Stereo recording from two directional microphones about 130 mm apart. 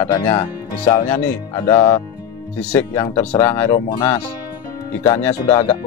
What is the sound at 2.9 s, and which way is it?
Speech, 25° left (ahead or behind).